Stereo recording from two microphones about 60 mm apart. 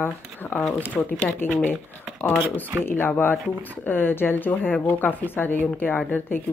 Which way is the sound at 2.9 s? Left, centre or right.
Left.